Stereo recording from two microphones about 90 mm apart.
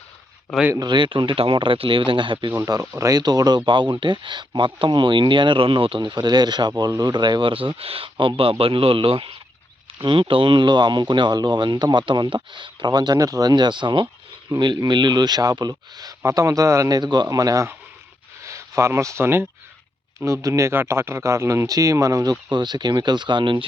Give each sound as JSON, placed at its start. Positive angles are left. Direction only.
{"t": 0.8, "sound": "speech", "side_deg": -60}
{"t": 2.9, "sound": "speech", "side_deg": -35}
{"t": 3.2, "sound": "speech", "side_deg": -50}
{"t": 3.7, "sound": "speech", "side_deg": -65}
{"t": 7.5, "sound": "speech", "side_deg": -80}
{"t": 10.0, "sound": "speech", "side_deg": -70}
{"t": 17.0, "sound": "speech", "side_deg": -50}
{"t": 22.5, "sound": "speech", "side_deg": -55}